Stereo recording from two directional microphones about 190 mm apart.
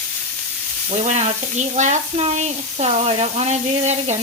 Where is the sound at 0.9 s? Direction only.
35° right (ahead or behind).